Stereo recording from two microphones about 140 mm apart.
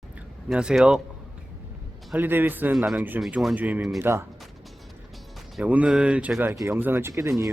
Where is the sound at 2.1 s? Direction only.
15° right (ahead or behind).